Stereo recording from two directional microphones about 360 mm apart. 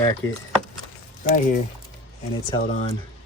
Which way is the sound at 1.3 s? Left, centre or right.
Left.